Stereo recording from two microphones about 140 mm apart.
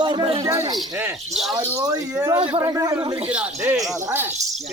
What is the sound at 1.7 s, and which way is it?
Speech, 25° right (ahead or behind).